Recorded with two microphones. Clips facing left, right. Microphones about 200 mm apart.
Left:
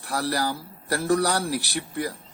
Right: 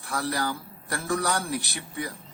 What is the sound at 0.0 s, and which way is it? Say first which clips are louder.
Speech: left 3 dB; 35° left (ahead or behind).